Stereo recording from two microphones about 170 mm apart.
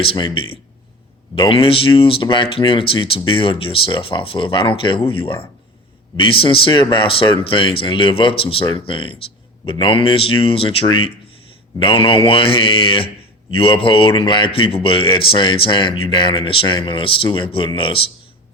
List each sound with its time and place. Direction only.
0.0 s speech: 30° left (ahead or behind)